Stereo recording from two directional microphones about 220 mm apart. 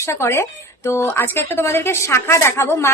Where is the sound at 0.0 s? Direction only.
10° left (ahead or behind).